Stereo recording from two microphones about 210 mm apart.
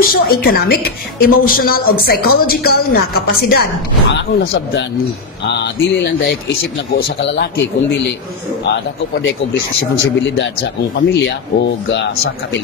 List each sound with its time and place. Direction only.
0.0 s a woman's voice: 45° left (ahead or behind)
5.5 s a woman's voice: 50° left (ahead or behind)
10.2 s speech: 55° left (ahead or behind)